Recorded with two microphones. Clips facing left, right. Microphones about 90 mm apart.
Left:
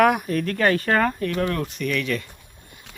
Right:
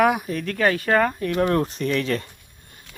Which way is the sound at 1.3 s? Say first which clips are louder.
Right 4 dB; 30° right (ahead or behind).